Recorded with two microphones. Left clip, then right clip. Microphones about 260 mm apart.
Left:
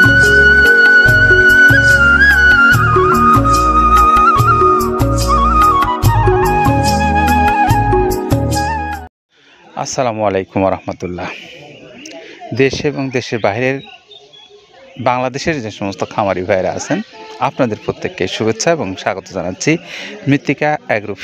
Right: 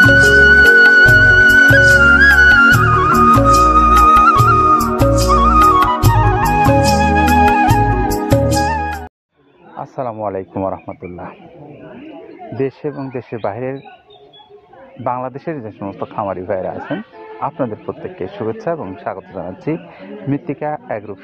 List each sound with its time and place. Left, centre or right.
0.0 s music: centre
9.8 s speech: left
12.5 s speech: left
15.0 s speech: left